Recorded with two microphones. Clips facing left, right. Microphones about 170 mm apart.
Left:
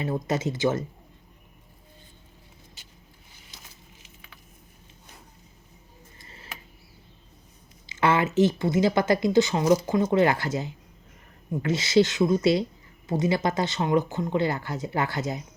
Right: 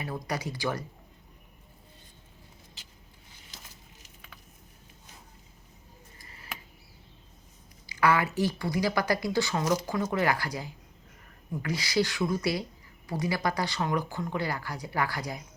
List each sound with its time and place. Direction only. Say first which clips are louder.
0.0 s speech: left 7 dB; 25° left (ahead or behind)
6.1 s a sound: left 5 dB; 25° left (ahead or behind)
7.9 s speech: left 2 dB; 25° left (ahead or behind)